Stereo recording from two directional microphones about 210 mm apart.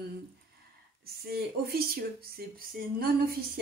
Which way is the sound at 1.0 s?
45° right (ahead or behind).